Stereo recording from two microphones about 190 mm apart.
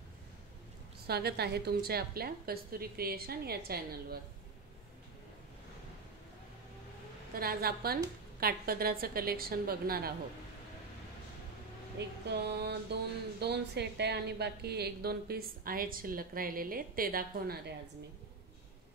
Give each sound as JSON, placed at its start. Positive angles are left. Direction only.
{"t": 1.0, "sound": "a woman's voice", "side_deg": -55}
{"t": 7.3, "sound": "a woman's voice", "side_deg": -55}
{"t": 12.3, "sound": "speech", "side_deg": -60}